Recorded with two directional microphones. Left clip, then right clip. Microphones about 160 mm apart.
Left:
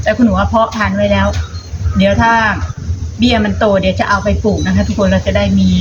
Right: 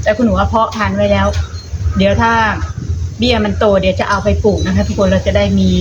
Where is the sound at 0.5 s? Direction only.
20° right (ahead or behind).